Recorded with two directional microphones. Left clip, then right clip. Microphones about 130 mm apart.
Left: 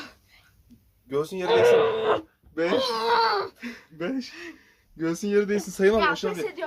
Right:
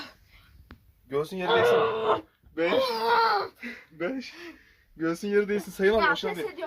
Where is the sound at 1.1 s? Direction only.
50° left (ahead or behind).